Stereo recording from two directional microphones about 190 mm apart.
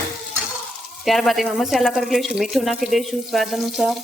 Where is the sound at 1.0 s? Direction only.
Centre (ahead or behind).